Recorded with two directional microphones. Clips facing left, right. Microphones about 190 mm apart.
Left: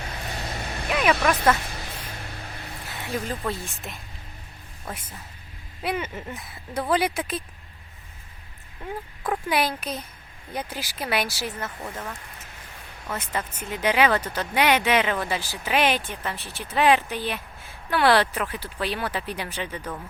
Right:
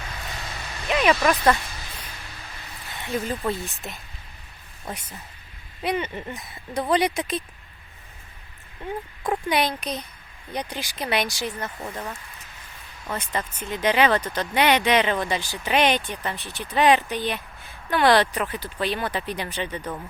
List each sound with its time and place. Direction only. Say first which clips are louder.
0.0 s vehicle: left 3 dB; 35° left (ahead or behind)
0.9 s speech: right 2 dB; 5° left (ahead or behind)
3.1 s speech: right 3 dB; centre (ahead or behind)
5.8 s speech: right 2 dB; 5° left (ahead or behind)
9.5 s speech: even; 5° left (ahead or behind)
11.8 s speech: right 2 dB; 15° right (ahead or behind)
13.1 s speech: right 1 dB; 10° left (ahead or behind)
19.8 s speech: right 2 dB; 10° right (ahead or behind)